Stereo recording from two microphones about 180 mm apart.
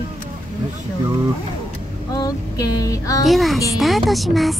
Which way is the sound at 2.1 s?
20° left (ahead or behind).